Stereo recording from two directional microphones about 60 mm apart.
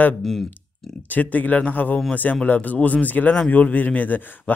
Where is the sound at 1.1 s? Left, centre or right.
Left.